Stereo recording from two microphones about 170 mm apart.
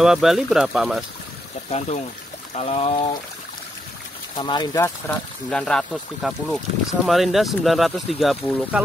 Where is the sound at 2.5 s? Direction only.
40° left (ahead or behind).